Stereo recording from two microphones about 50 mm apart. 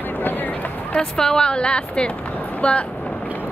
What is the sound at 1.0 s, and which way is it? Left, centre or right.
A woman's voice, centre.